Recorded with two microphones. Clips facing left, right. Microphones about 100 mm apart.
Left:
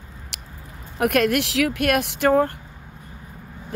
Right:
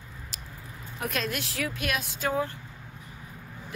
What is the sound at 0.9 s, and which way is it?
Speech, 65° left (ahead or behind).